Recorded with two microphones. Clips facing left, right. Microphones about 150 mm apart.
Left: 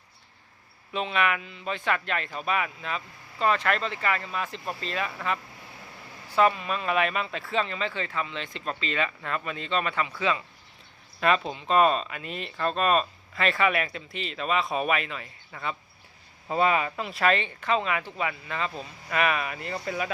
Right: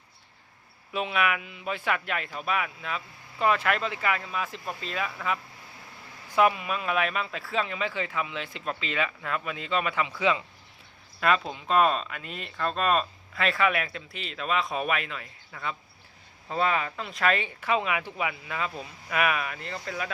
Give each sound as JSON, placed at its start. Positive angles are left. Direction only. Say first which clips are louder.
{"t": 0.9, "sound": "speech", "louder": "left 1 dB", "side_deg": -5}
{"t": 11.2, "sound": "speech", "louder": "left 1 dB", "side_deg": 0}